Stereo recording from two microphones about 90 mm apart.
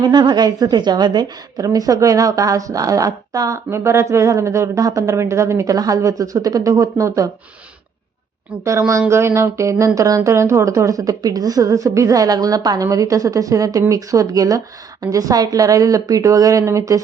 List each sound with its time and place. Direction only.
0.0 s a woman's voice: 55° right (ahead or behind); by 7.3 s 35° right (ahead or behind)
8.9 s a woman's voice: 30° right (ahead or behind)